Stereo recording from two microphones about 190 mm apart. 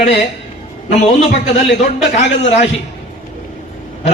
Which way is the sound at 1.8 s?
35° left (ahead or behind).